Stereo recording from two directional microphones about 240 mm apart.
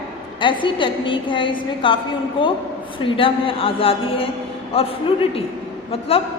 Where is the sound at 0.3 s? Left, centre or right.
Centre.